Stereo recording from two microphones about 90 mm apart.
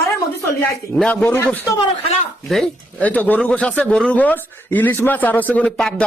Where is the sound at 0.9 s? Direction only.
10° left (ahead or behind).